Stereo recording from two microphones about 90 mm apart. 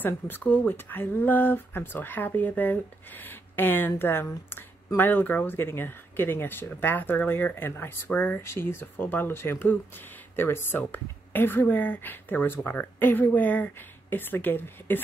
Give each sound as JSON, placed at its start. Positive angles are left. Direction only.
{"t": 0.0, "sound": "speech", "side_deg": 20}